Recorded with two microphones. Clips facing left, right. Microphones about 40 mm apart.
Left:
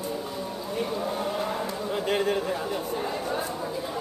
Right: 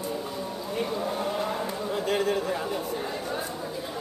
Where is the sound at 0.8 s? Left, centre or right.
Centre.